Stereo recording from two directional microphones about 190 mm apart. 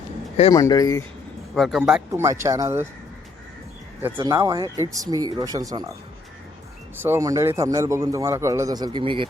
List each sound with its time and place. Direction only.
0.5 s speech: 20° left (ahead or behind)
1.5 s speech: centre (ahead or behind)
1.8 s a man's voice: 10° right (ahead or behind)
4.0 s speech: 15° right (ahead or behind)
6.9 s a man's voice: 10° right (ahead or behind)